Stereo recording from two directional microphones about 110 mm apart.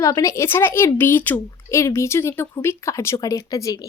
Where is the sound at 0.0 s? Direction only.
30° left (ahead or behind).